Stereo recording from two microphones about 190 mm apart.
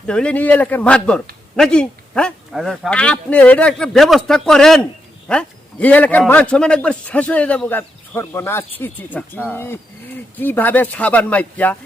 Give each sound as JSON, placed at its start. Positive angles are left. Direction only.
{"t": 0.1, "sound": "a man's voice", "side_deg": 5}